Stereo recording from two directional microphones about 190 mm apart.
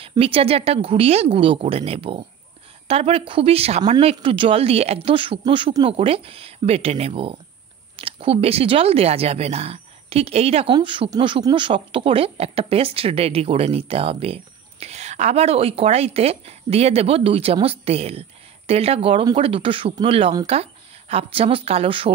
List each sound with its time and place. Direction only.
0.0 s a woman's voice: 30° right (ahead or behind)